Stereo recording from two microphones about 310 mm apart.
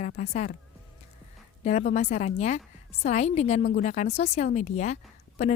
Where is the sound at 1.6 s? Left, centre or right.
Left.